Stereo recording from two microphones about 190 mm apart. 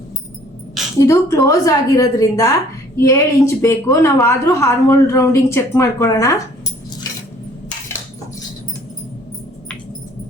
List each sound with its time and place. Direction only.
0.9 s a woman's voice: 15° left (ahead or behind)